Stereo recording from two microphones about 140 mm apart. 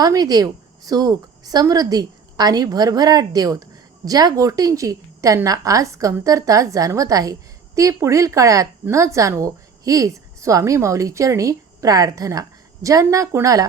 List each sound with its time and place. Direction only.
0.0 s a woman's voice: 30° right (ahead or behind)